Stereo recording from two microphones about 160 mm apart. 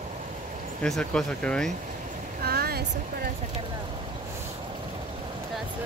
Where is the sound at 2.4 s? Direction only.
75° right (ahead or behind).